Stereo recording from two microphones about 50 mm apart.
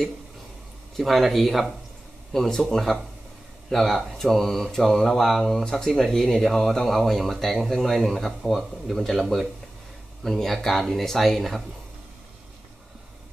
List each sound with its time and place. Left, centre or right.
0.9 s speech: centre
10.2 s speech: centre